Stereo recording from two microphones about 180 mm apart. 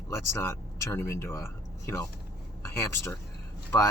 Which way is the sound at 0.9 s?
15° left (ahead or behind).